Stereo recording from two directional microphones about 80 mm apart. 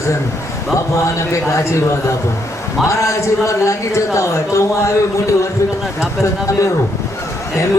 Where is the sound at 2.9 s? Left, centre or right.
Left.